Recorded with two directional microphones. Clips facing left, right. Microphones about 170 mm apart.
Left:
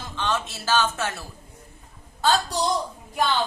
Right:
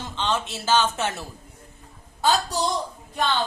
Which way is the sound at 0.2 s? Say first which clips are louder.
Right 1 dB; 20° right (ahead or behind).